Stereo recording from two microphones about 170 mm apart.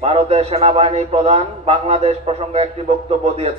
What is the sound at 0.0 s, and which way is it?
A man's voice, 35° right (ahead or behind).